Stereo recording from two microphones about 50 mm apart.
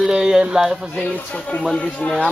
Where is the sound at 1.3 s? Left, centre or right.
Centre.